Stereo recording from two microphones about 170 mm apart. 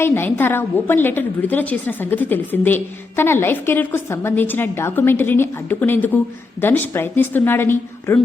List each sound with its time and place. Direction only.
0.0 s a woman's voice: 15° left (ahead or behind)